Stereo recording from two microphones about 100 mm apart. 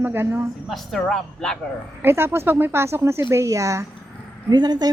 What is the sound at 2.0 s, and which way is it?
A woman's voice, 25° right (ahead or behind).